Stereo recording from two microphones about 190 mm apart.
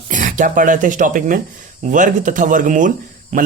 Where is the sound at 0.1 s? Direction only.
40° right (ahead or behind).